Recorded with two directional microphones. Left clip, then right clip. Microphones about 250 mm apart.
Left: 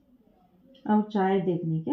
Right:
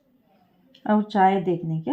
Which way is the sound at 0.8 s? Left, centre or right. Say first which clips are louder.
Right 7 dB; right.